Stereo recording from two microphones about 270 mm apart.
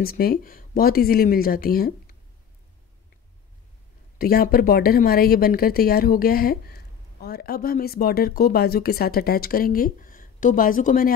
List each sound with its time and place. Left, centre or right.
0.0 s speech: left
4.2 s speech: left